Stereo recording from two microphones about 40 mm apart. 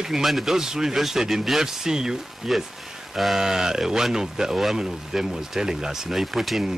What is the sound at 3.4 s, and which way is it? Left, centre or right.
Speech, centre.